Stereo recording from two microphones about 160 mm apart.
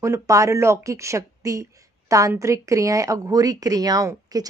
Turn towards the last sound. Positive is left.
turn(degrees=-25)  # may be behind; listen again after turning